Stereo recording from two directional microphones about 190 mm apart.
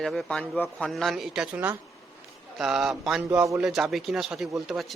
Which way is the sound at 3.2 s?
15° right (ahead or behind).